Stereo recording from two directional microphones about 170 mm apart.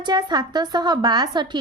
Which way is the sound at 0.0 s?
25° right (ahead or behind).